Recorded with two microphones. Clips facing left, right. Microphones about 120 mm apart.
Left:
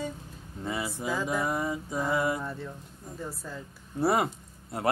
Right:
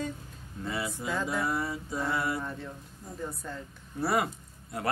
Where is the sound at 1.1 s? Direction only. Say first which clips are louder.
Left 1 dB; 10° left (ahead or behind).